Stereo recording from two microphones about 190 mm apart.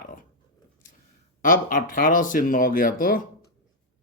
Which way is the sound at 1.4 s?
45° left (ahead or behind).